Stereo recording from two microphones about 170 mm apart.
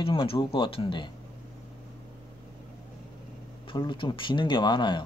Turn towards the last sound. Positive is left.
turn(degrees=25)  # may be behind; listen again after turning